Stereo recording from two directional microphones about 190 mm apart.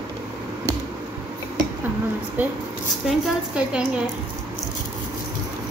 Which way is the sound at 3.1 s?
5° right (ahead or behind).